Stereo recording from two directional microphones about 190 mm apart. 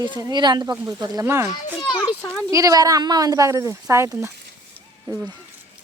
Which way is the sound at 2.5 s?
20° right (ahead or behind).